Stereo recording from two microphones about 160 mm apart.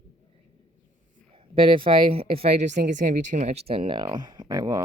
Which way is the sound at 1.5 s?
35° right (ahead or behind).